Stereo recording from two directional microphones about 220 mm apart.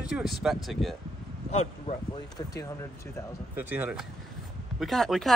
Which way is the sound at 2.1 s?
15° left (ahead or behind).